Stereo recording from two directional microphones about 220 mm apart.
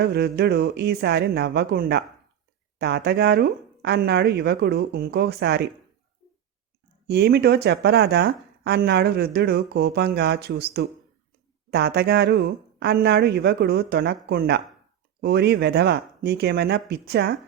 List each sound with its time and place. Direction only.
0.0 s speech: 45° right (ahead or behind)
7.1 s speech: 45° right (ahead or behind)